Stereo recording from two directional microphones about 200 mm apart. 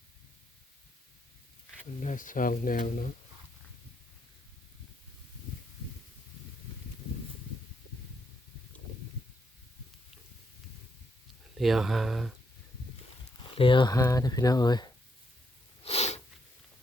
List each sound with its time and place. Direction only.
2.0 s speech: 40° left (ahead or behind)
11.5 s speech: centre (ahead or behind)
13.4 s speech: 25° left (ahead or behind)
15.8 s sneeze: 30° left (ahead or behind)